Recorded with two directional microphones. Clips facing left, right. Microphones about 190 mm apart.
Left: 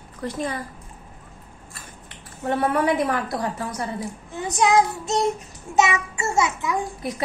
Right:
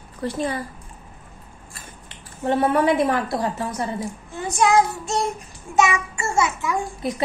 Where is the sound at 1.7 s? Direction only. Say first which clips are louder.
Right 1 dB; 25° right (ahead or behind).